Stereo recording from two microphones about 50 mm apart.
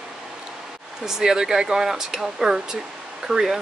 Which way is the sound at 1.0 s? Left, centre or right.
Centre.